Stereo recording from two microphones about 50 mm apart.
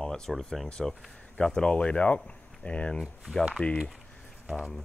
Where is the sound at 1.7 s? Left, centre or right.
Left.